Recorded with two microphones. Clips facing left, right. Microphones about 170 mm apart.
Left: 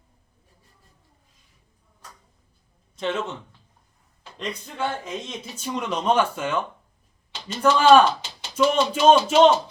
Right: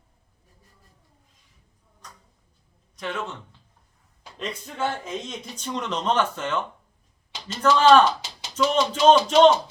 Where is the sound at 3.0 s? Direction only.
25° left (ahead or behind).